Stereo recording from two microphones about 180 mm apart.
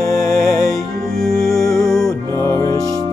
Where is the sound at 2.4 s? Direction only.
15° left (ahead or behind).